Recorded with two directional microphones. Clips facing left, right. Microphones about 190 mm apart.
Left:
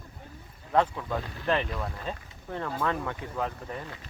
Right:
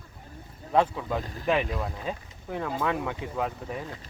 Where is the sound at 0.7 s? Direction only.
10° right (ahead or behind).